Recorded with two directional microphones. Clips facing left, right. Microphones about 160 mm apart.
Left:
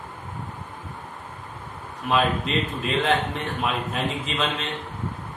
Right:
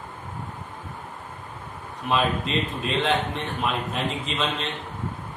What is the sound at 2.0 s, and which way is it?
A man's voice, centre (ahead or behind).